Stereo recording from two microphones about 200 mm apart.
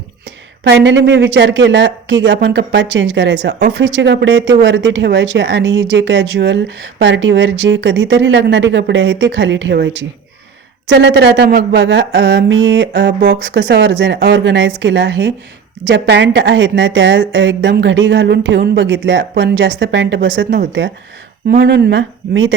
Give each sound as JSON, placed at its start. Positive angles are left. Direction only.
{"t": 0.6, "sound": "speech", "side_deg": -60}
{"t": 21.6, "sound": "speech", "side_deg": -55}